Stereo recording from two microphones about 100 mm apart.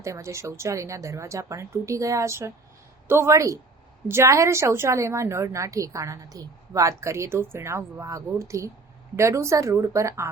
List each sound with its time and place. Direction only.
0.0 s a woman's voice: 30° right (ahead or behind)